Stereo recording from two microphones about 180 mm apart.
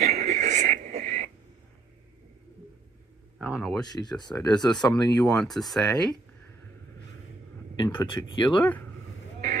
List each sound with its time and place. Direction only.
0.0 s a sound: 40° right (ahead or behind)
3.3 s speech: 5° right (ahead or behind)
3.8 s speech: 20° left (ahead or behind)
5.2 s speech: centre (ahead or behind)
7.8 s speech: 20° left (ahead or behind)